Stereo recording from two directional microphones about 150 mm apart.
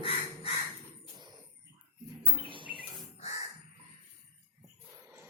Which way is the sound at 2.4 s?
35° right (ahead or behind).